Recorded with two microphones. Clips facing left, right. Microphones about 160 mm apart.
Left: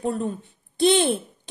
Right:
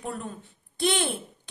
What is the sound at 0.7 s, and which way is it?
Speech, 25° left (ahead or behind).